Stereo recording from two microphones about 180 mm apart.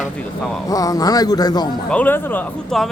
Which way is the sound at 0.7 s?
20° left (ahead or behind).